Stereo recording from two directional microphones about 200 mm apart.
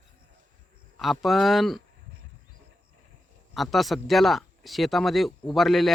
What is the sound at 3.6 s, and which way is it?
Speech, centre (ahead or behind).